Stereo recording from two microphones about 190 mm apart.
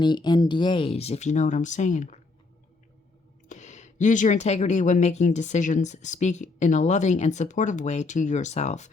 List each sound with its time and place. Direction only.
0.0 s speech: 25° left (ahead or behind); by 2.1 s 40° left (ahead or behind)
3.5 s speech: 40° left (ahead or behind)